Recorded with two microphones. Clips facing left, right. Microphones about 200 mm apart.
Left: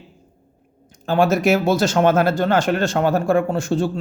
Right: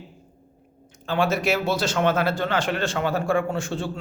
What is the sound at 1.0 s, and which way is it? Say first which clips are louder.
Speech: left 6 dB; 45° left (ahead or behind).